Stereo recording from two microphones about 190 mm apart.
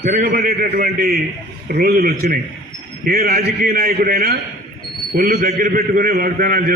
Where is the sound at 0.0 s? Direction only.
45° right (ahead or behind).